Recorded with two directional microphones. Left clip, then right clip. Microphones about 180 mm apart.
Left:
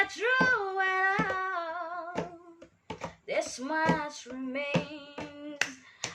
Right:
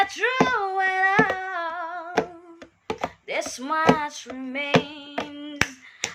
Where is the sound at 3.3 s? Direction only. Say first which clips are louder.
Right 3 dB; 15° left (ahead or behind).